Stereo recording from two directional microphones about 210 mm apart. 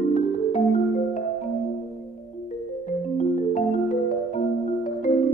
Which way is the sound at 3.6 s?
35° left (ahead or behind).